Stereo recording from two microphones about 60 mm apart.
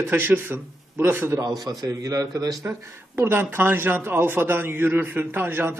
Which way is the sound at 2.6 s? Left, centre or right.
Right.